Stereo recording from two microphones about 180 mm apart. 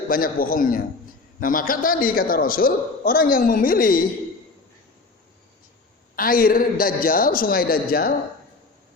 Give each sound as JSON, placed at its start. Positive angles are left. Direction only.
{"t": 0.1, "sound": "a man's voice", "side_deg": 55}
{"t": 6.1, "sound": "a man's voice", "side_deg": 55}